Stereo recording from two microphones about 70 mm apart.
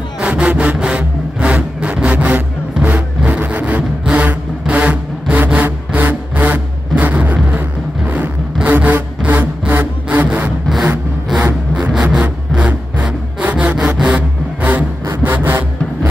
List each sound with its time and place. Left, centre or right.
0.2 s sawing: centre
5.3 s music: right
5.9 s vehicle: right
7.3 s music: centre
10.0 s a sound: right
11.8 s a sound: centre
14.0 s vehicle: right